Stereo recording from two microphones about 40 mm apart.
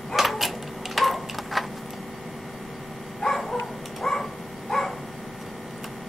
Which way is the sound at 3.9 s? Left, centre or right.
Centre.